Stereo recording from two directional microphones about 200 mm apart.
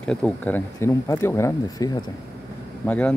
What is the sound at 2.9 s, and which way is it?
Speech, 5° left (ahead or behind).